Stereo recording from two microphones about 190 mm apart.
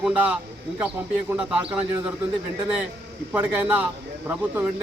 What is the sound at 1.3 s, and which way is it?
Speech, 5° right (ahead or behind).